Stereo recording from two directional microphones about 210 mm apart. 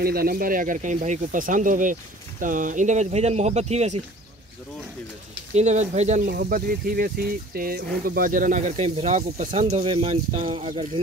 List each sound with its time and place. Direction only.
0.0 s speech: 45° right (ahead or behind)
5.5 s speech: 35° right (ahead or behind)